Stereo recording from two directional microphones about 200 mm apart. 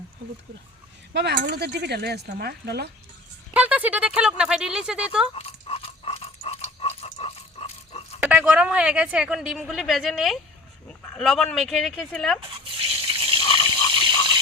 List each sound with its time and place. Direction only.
1.1 s speech: 60° right (ahead or behind)
3.5 s speech: 5° right (ahead or behind)
5.3 s a sound: 30° left (ahead or behind)
8.2 s speech: 5° right (ahead or behind)
12.8 s toothbrush: 25° right (ahead or behind)
13.4 s water: 30° left (ahead or behind)